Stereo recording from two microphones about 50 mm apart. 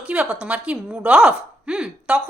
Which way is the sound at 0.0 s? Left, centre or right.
Centre.